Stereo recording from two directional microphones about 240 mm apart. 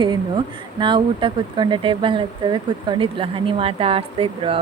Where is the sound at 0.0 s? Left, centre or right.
Centre.